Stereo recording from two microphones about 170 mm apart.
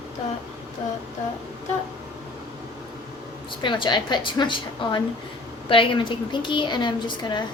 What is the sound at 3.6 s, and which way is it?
A woman's voice, 30° left (ahead or behind).